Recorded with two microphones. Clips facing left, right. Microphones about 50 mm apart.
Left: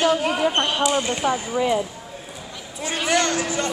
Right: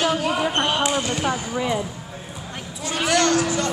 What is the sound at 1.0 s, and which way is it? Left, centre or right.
Speech, left.